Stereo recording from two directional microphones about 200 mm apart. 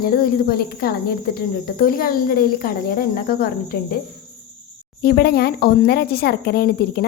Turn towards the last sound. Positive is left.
turn(degrees=55)  # may be behind; listen again after turning